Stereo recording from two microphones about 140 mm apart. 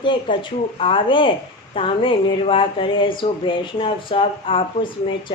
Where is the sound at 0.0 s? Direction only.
35° left (ahead or behind).